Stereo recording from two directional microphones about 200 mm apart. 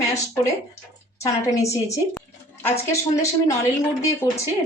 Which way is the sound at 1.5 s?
15° left (ahead or behind).